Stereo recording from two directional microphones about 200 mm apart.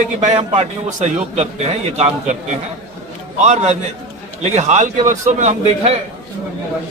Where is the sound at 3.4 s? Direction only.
35° right (ahead or behind).